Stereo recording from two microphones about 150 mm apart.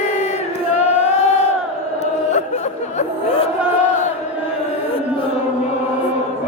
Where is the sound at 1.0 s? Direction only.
50° left (ahead or behind).